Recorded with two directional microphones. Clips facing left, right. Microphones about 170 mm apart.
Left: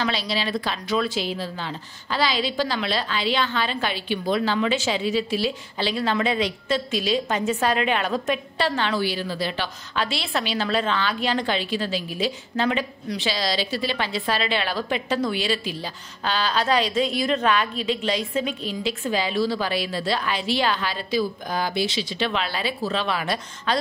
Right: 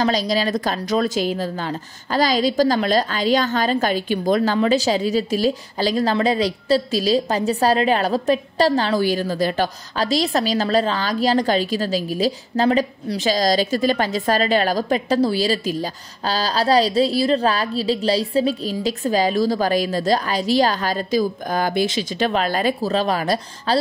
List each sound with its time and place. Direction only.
0.0 s a woman's voice: 40° right (ahead or behind)